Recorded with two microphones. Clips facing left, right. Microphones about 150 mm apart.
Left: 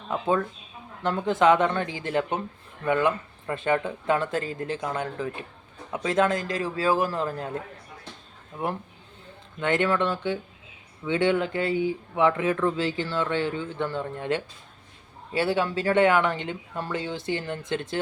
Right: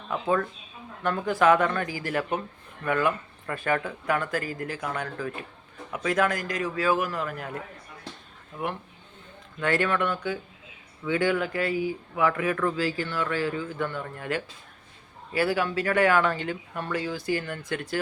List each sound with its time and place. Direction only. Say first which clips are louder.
0.1 s speech: left 1 dB; 20° left (ahead or behind)